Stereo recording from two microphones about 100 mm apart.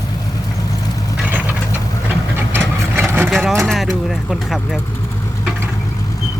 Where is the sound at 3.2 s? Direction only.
Centre (ahead or behind).